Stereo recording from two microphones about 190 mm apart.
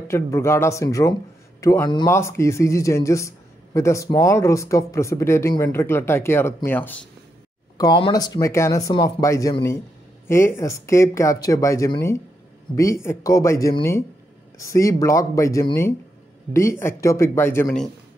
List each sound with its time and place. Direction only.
0.1 s speech: 15° left (ahead or behind)
7.7 s speech: 20° left (ahead or behind)